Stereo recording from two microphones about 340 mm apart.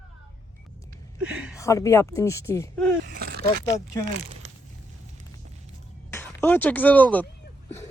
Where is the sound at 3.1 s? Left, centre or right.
Right.